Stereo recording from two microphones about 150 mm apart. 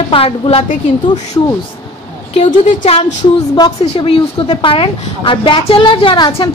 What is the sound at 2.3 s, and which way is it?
Speech, 55° left (ahead or behind).